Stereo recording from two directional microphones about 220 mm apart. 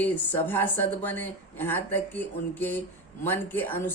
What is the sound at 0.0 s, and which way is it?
Speech, 10° left (ahead or behind).